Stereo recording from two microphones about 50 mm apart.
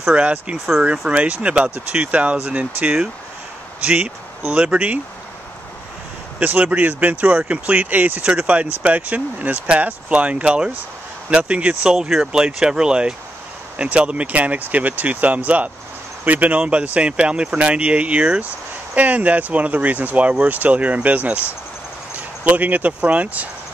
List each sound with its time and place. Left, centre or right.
0.1 s speech: right
3.8 s speech: right
6.4 s speech: right
11.9 s speech: centre; by 23.5 s right